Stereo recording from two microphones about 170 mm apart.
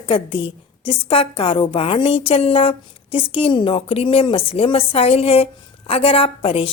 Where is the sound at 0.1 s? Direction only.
30° left (ahead or behind).